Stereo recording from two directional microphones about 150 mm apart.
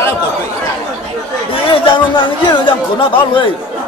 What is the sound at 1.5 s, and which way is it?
Chatter, 35° left (ahead or behind).